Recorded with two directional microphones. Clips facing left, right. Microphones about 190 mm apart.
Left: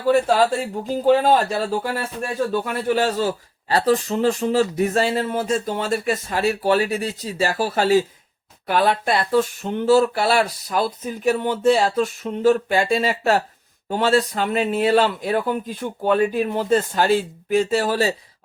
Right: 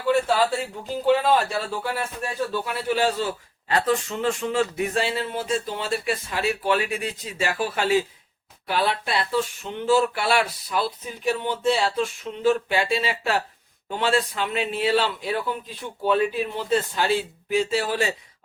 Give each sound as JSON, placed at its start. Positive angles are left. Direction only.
{"t": 0.0, "sound": "a man's voice", "side_deg": 40}
{"t": 8.6, "sound": "speech", "side_deg": 50}